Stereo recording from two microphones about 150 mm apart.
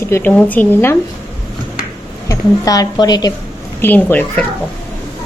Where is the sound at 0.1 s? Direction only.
10° left (ahead or behind).